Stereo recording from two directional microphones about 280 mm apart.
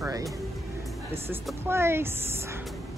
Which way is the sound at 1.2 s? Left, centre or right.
Centre.